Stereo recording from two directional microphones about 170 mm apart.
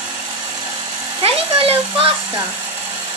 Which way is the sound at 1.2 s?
35° right (ahead or behind).